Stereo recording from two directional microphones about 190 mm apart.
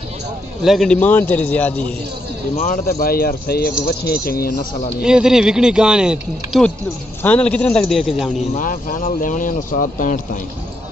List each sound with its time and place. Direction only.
0.7 s speech: centre (ahead or behind)
2.5 s speech: 40° left (ahead or behind)
5.0 s speech: 5° right (ahead or behind)
8.5 s speech: 45° left (ahead or behind)